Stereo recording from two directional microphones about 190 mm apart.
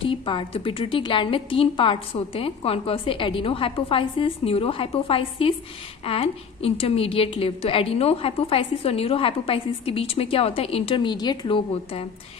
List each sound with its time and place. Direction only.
0.0 s a woman's voice: 25° left (ahead or behind)